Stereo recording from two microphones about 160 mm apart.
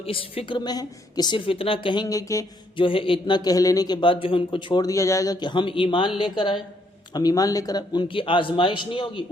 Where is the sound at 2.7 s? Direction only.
35° left (ahead or behind).